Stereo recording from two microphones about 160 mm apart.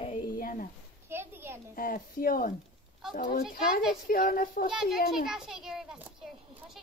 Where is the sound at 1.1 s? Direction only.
15° right (ahead or behind).